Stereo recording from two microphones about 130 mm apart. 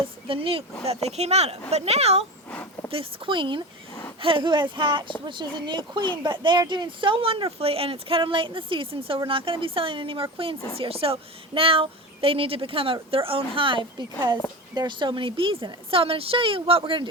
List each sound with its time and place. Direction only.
0.0 s a woman's voice: 45° right (ahead or behind)
1.0 s a woman's voice: 55° right (ahead or behind)
2.5 s a sound: 10° left (ahead or behind)
2.9 s a woman's voice: 45° right (ahead or behind)